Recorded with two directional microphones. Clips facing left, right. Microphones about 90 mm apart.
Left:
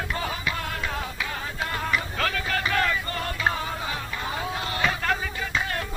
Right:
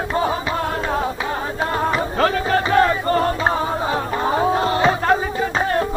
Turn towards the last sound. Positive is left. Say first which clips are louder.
# right 9 dB
turn(degrees=-35)  # may be behind; listen again after turning